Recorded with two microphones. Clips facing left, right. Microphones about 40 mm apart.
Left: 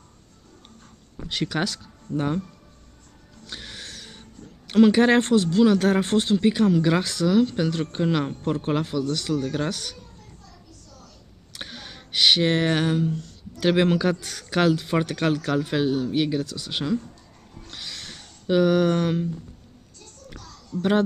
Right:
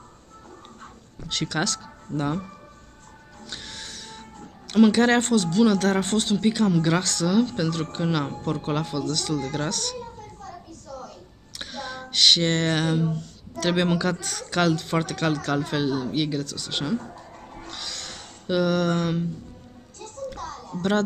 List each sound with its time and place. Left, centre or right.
1.1 s speech: centre
3.4 s music: centre
4.6 s speech: centre
9.9 s a sound: right
11.5 s a sound: centre
13.0 s speech: centre
17.6 s cat: centre
18.5 s speech: centre
20.3 s a sound: right